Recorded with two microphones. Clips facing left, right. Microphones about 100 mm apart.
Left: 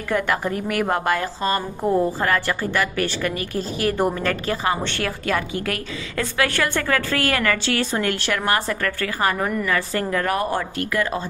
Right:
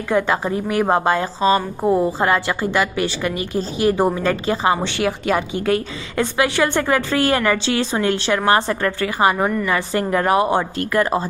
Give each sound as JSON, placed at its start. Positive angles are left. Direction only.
{"t": 0.1, "sound": "a woman's voice", "side_deg": -20}
{"t": 10.9, "sound": "a woman's voice", "side_deg": -35}